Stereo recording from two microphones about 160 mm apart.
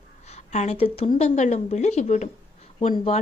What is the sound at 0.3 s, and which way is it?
A woman's voice, 45° left (ahead or behind).